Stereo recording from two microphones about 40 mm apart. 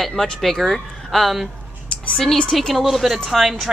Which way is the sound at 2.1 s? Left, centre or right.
Centre.